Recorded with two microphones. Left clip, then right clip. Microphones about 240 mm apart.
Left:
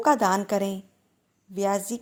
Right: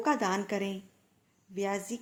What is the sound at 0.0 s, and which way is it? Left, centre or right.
A woman's voice, left.